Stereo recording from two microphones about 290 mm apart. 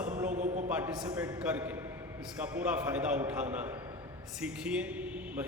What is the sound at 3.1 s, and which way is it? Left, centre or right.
A man's voice, centre.